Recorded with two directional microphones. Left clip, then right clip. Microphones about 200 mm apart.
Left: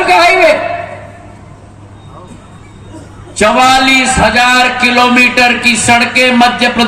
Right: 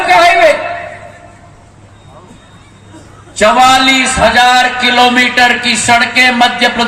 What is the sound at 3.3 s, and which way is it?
Speech, 35° right (ahead or behind).